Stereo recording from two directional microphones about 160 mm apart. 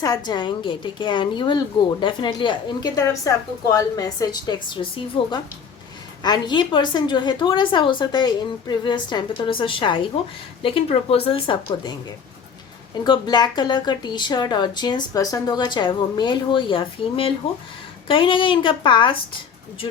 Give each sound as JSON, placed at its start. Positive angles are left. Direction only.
{"t": 0.0, "sound": "a woman's voice", "side_deg": 25}
{"t": 13.1, "sound": "a woman's voice", "side_deg": 25}